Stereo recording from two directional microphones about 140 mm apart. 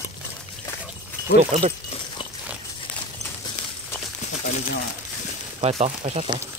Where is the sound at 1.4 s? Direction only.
55° right (ahead or behind).